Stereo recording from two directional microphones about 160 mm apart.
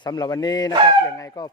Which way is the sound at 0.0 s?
25° left (ahead or behind).